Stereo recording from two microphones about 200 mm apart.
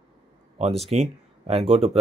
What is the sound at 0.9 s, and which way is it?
Speech, 35° right (ahead or behind).